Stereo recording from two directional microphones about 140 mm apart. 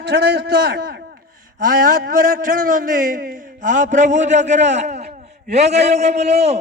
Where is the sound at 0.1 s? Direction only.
90° right.